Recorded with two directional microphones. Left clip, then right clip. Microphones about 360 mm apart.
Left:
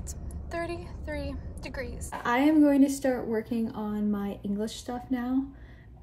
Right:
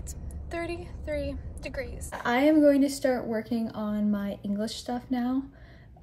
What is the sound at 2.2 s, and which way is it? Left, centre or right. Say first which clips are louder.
A woman's voice: right 2 dB; centre.